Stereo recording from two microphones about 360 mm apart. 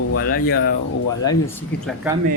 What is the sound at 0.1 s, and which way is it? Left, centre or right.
Speech, left.